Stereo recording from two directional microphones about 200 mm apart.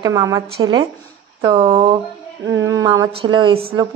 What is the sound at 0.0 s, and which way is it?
A woman's voice, 15° right (ahead or behind).